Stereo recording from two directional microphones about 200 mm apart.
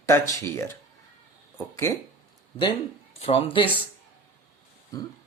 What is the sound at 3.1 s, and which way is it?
Speech, 30° left (ahead or behind).